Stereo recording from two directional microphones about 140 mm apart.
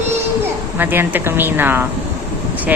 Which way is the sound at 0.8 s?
15° right (ahead or behind).